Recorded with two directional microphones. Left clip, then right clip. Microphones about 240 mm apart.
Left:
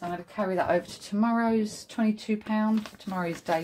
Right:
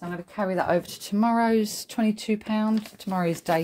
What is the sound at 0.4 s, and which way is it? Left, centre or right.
Speech, right.